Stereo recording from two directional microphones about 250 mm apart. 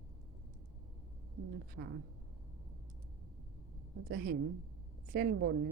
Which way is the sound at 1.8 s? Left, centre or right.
Right.